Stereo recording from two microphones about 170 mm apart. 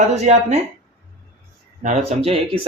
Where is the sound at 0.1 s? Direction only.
40° right (ahead or behind).